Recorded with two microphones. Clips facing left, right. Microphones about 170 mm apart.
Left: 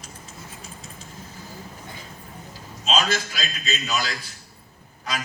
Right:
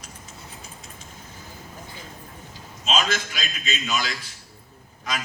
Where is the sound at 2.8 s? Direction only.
35° left (ahead or behind).